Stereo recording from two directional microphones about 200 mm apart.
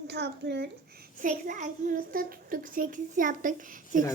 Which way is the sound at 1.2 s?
40° right (ahead or behind).